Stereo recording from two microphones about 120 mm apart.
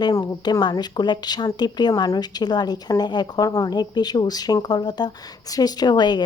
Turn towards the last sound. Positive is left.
turn(degrees=35)  # may be behind; listen again after turning